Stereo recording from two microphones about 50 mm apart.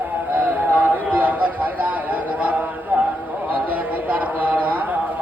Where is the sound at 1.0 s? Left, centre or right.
Right.